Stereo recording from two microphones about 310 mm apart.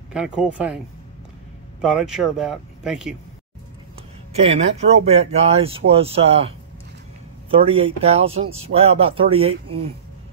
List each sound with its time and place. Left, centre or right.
0.1 s speech: centre
1.8 s speech: centre
4.3 s speech: centre
7.5 s speech: centre